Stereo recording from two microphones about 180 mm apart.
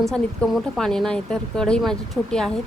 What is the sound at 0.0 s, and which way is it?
Speech, centre (ahead or behind).